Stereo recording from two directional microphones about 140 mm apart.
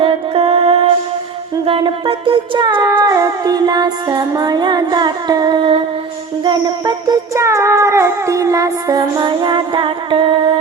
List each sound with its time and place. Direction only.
0.0 s music: 40° right (ahead or behind)
3.0 s cat: 25° right (ahead or behind)
6.4 s music: 35° right (ahead or behind)
7.3 s cat: 20° right (ahead or behind); by 10.6 s 40° right (ahead or behind)